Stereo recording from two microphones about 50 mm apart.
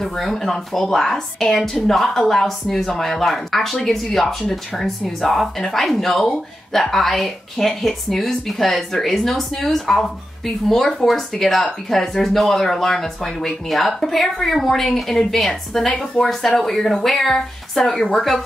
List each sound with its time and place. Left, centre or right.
0.0 s speech: centre